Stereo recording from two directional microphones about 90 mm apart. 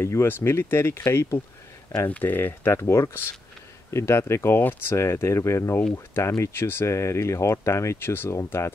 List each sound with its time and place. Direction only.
0.0 s speech: 30° left (ahead or behind)
2.0 s speech: 20° left (ahead or behind)